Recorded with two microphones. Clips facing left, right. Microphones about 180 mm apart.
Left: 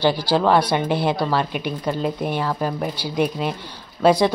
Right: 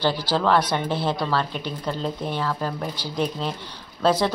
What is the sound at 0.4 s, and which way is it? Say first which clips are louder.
A woman's voice: left 2 dB; 10° left (ahead or behind).